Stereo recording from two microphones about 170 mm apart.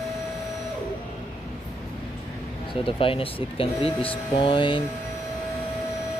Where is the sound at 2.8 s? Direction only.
30° left (ahead or behind).